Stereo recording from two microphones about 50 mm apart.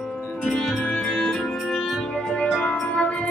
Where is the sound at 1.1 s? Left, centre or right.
Centre.